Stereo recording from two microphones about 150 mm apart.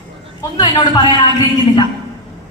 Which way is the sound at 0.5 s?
30° left (ahead or behind).